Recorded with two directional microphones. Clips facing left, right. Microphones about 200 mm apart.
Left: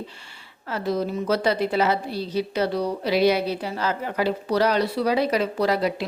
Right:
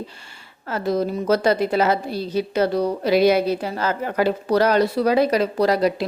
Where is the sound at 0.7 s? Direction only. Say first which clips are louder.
Right 3 dB; 45° right (ahead or behind).